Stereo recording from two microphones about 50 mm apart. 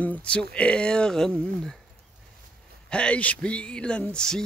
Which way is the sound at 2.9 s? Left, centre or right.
Left.